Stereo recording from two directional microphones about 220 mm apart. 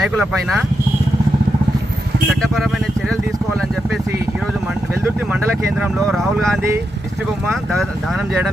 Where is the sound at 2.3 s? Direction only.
Centre (ahead or behind).